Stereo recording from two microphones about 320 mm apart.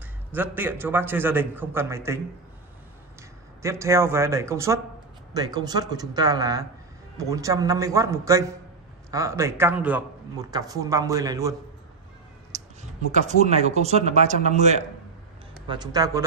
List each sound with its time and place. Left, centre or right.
0.3 s a man's voice: centre
3.6 s a man's voice: centre
12.5 s cat: right
13.1 s a man's voice: right